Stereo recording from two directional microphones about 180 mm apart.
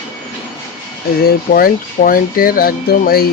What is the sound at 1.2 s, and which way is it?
Speech, 55° left (ahead or behind).